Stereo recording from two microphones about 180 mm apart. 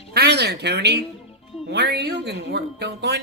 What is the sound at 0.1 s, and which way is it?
Speech, 65° right (ahead or behind).